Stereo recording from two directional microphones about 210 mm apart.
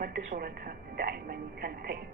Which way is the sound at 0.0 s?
45° right (ahead or behind).